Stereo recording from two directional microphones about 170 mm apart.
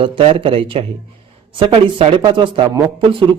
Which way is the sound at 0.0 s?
35° right (ahead or behind).